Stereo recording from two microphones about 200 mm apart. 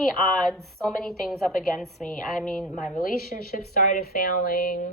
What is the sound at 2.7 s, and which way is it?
A woman's voice, 40° left (ahead or behind).